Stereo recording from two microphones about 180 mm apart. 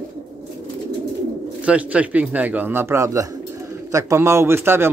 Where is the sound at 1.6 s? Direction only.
5° right (ahead or behind).